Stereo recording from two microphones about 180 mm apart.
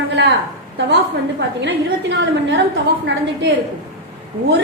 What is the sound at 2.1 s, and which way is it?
Speech, 75° right (ahead or behind).